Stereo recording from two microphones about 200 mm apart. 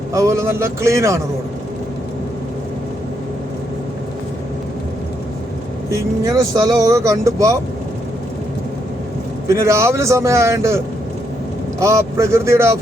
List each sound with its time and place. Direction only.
0.1 s speech: 15° right (ahead or behind)
6.2 s speech: 15° right (ahead or behind)
9.5 s speech: 15° right (ahead or behind)
11.8 s speech: 15° right (ahead or behind)